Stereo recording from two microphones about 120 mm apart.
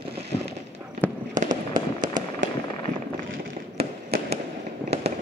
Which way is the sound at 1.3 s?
90° right.